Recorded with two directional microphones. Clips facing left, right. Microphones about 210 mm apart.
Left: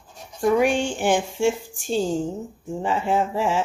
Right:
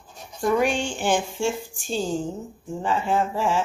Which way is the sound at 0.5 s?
15° left (ahead or behind).